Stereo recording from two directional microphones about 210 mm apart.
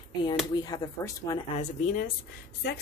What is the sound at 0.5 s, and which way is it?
Speech, 20° left (ahead or behind).